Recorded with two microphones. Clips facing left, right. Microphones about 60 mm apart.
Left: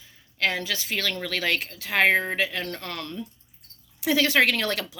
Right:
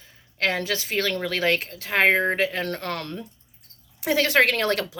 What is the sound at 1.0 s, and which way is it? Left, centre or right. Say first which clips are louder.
Speech: right 5 dB; right.